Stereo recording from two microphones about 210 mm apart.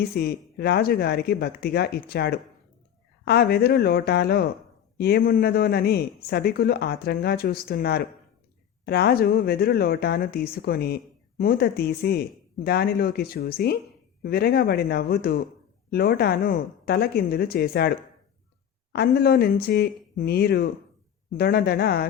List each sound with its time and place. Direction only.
0.0 s speech: 50° left (ahead or behind)
18.9 s speech: 45° left (ahead or behind)